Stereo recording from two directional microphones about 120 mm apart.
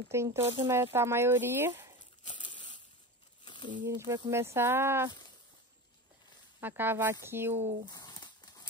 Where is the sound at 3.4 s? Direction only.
40° left (ahead or behind).